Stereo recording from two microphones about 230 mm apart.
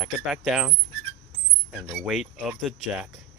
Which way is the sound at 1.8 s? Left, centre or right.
Centre.